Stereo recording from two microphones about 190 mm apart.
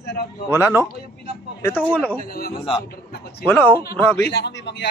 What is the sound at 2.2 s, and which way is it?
Speech, 50° left (ahead or behind).